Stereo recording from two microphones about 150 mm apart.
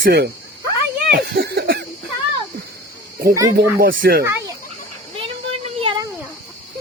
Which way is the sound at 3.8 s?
75° right (ahead or behind).